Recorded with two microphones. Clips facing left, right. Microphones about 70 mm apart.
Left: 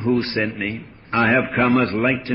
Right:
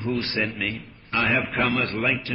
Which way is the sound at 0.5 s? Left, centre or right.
Left.